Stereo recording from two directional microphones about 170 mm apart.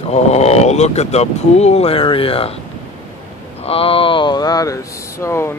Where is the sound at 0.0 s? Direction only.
40° left (ahead or behind).